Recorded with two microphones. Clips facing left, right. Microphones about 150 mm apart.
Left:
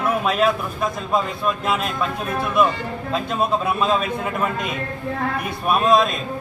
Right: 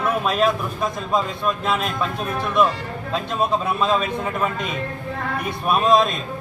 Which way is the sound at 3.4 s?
5° left (ahead or behind).